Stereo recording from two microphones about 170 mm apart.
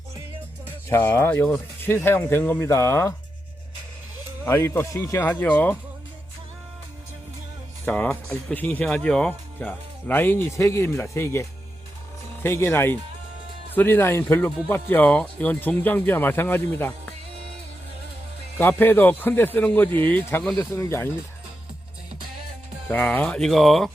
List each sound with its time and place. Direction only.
0.9 s speech: 10° left (ahead or behind)
4.4 s speech: 15° left (ahead or behind)
7.9 s speech: 10° left (ahead or behind)
18.6 s speech: 10° left (ahead or behind)
20.6 s speech: 20° left (ahead or behind)
22.9 s speech: 10° left (ahead or behind)